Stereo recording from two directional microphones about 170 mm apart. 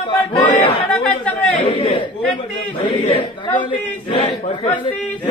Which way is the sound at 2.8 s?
30° left (ahead or behind).